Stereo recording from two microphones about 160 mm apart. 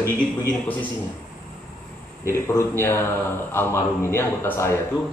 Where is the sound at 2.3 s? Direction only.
15° left (ahead or behind).